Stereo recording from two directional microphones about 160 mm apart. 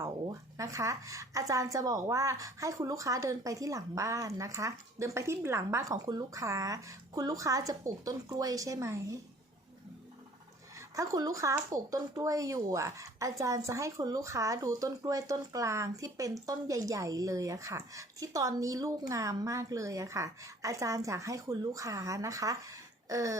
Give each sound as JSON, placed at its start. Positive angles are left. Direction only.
{"t": 0.0, "sound": "a woman's voice", "side_deg": -20}
{"t": 10.8, "sound": "a woman's voice", "side_deg": -20}